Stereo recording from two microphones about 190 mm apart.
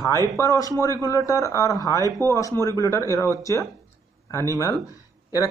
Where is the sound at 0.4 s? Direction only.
15° left (ahead or behind).